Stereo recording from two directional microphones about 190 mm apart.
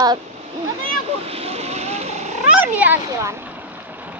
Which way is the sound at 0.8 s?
30° right (ahead or behind).